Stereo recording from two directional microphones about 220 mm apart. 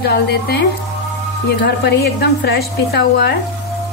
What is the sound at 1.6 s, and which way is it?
Speech, 50° left (ahead or behind).